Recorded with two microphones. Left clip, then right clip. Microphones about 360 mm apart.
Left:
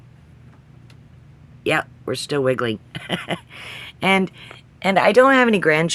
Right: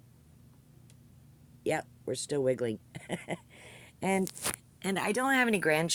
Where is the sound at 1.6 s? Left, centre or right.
Right.